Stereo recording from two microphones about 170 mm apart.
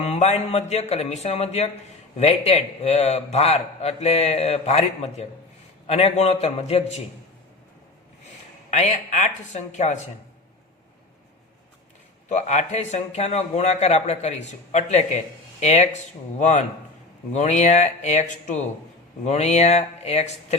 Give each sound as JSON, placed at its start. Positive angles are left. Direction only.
{"t": 0.0, "sound": "a man's voice", "side_deg": 40}
{"t": 8.7, "sound": "speech", "side_deg": 45}
{"t": 12.3, "sound": "a man's voice", "side_deg": 45}